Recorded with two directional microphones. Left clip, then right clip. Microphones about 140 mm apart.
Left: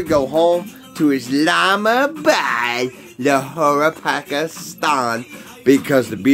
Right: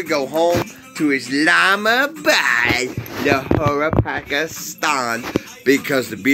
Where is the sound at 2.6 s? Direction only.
20° left (ahead or behind).